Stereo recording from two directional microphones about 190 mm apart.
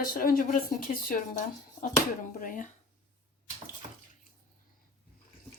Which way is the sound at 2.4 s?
45° left (ahead or behind).